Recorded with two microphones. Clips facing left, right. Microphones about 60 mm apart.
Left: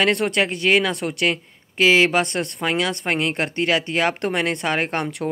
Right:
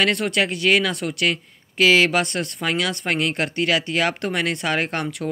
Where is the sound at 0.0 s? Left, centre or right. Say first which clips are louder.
Left 1 dB; left.